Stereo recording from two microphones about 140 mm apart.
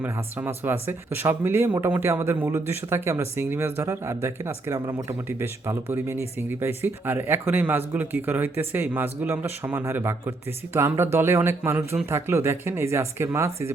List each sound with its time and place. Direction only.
0.0 s speech: 15° right (ahead or behind)